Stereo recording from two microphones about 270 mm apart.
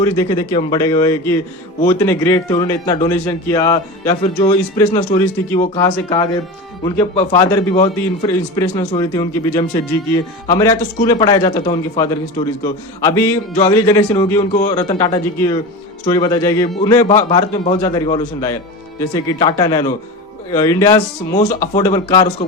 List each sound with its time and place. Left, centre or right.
0.0 s a man's voice: centre
21.3 s speech: left
21.8 s a man's voice: centre